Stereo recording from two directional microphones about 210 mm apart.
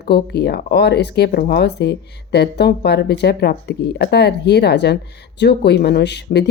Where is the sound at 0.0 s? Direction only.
50° left (ahead or behind).